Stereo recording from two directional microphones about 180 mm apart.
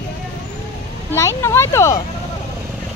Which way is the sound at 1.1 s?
15° left (ahead or behind).